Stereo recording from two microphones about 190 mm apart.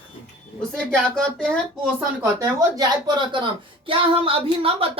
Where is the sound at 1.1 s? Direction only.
5° left (ahead or behind).